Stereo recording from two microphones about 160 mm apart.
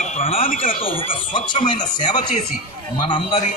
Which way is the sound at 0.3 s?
60° left (ahead or behind).